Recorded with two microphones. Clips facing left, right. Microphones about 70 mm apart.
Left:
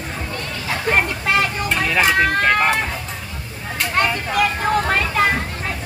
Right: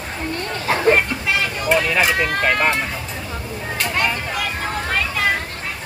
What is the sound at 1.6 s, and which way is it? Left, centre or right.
Speech, centre.